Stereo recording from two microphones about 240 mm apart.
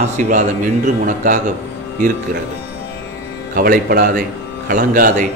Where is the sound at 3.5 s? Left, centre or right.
Right.